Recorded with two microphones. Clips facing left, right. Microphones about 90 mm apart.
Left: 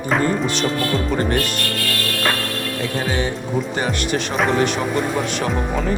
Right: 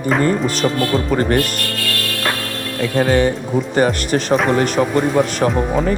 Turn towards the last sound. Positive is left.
turn(degrees=-40)  # may be behind; listen again after turning